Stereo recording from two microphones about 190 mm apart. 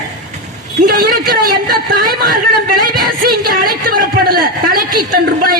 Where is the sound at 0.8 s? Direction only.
50° right (ahead or behind).